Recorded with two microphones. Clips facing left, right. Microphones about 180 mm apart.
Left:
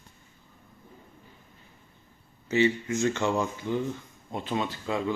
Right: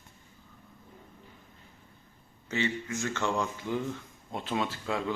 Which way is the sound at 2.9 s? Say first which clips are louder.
Left 5 dB; 20° left (ahead or behind).